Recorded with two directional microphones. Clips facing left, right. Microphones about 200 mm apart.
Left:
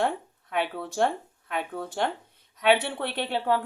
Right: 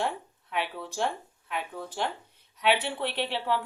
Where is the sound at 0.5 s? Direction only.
50° left (ahead or behind).